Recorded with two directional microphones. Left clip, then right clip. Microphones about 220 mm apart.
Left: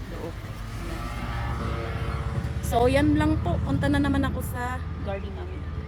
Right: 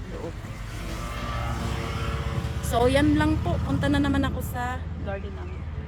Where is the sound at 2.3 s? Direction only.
35° right (ahead or behind).